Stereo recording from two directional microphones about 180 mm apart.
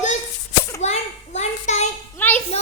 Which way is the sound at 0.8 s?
40° left (ahead or behind).